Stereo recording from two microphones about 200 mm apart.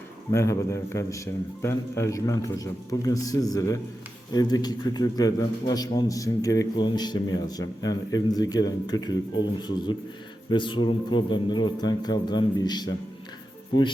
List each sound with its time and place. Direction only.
0.3 s a man's voice: 15° left (ahead or behind)